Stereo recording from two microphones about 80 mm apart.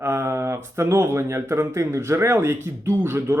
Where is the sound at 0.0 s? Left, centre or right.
Right.